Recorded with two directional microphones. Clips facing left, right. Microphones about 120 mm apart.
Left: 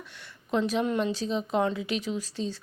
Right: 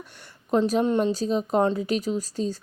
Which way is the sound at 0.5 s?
40° right (ahead or behind).